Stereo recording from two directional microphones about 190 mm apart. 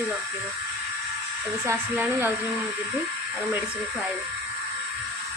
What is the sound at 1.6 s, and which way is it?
Speech, 10° right (ahead or behind).